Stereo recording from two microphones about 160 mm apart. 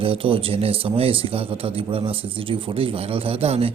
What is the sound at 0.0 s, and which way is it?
A man's voice, 35° right (ahead or behind).